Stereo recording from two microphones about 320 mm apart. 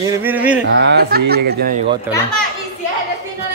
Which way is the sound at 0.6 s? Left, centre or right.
Right.